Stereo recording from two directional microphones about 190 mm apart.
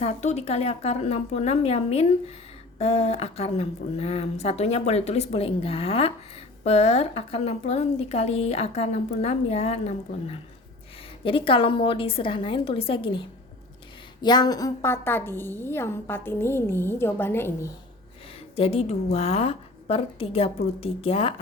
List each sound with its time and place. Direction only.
0.0 s a woman's voice: 35° left (ahead or behind); by 17.7 s 10° left (ahead or behind)
18.5 s a woman's voice: 30° left (ahead or behind)